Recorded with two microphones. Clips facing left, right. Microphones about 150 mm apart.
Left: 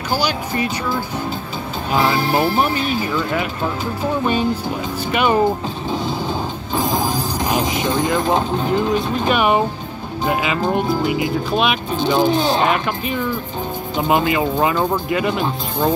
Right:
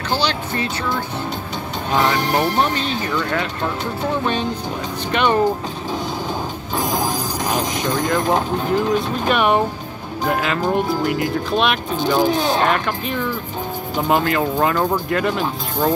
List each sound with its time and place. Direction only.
0.1 s speech: 10° left (ahead or behind)
6.7 s speech: centre (ahead or behind)